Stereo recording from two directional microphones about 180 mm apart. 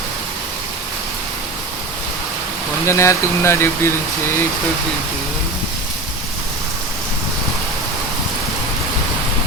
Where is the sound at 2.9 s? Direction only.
15° left (ahead or behind).